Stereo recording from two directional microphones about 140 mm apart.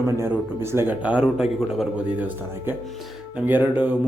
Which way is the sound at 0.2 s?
20° right (ahead or behind).